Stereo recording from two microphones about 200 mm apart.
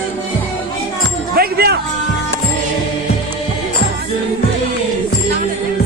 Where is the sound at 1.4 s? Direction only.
50° right (ahead or behind).